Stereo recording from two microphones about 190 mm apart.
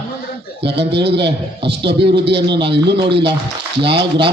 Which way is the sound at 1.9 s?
30° right (ahead or behind).